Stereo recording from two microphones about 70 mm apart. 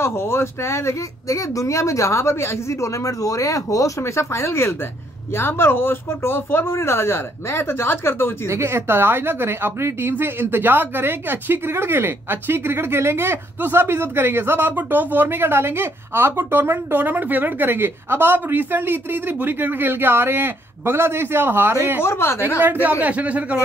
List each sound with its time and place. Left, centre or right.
0.0 s speech: left
8.5 s speech: right
22.0 s speech: left
22.8 s speech: right